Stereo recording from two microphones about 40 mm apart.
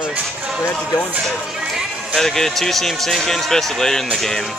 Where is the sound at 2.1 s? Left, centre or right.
Centre.